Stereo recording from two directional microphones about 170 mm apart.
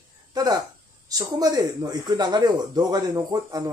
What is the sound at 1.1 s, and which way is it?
Speech, 20° right (ahead or behind).